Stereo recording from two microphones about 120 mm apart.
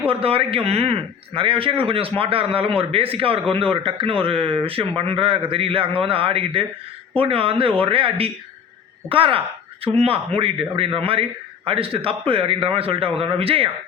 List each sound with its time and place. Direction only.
0.1 s a man's voice: 50° right (ahead or behind)